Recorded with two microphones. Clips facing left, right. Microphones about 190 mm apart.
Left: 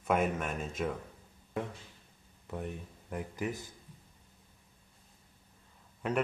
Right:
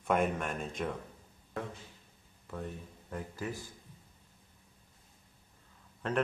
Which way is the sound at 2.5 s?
15° left (ahead or behind).